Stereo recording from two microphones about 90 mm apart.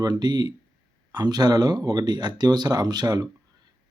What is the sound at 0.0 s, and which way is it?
Speech, 50° right (ahead or behind).